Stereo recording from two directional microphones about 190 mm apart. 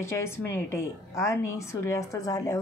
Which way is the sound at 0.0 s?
15° left (ahead or behind).